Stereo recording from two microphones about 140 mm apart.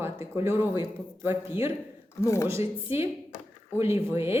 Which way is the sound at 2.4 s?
20° right (ahead or behind).